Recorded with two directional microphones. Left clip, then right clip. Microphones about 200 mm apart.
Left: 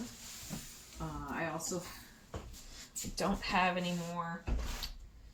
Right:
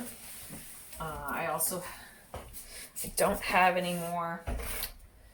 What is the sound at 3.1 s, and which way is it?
Speech, 20° right (ahead or behind).